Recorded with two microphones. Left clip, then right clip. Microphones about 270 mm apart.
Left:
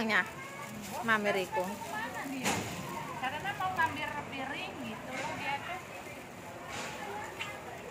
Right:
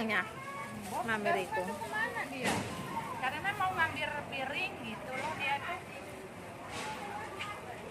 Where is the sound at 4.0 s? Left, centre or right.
Right.